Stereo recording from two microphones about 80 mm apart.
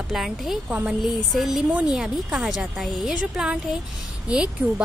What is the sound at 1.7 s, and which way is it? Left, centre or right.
Speech, centre.